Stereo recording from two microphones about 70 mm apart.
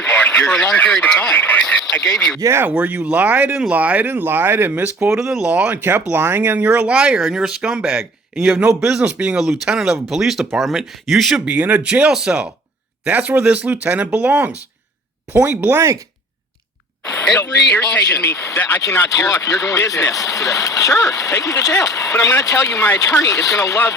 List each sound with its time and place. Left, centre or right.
0.0 s radio: left
1.3 s speech: left
1.5 s a sound: centre
2.4 s speech: right
2.6 s speech: centre
5.2 s speech: centre
5.5 s speech: right
6.1 s speech: right; by 9.0 s centre
9.0 s speech: centre
9.4 s speech: centre
11.4 s speech: right
17.7 s speech: left
18.9 s speech: left